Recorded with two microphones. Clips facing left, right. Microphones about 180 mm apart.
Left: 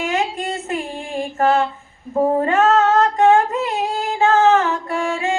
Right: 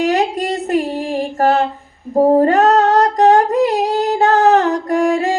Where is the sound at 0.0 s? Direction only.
40° right (ahead or behind).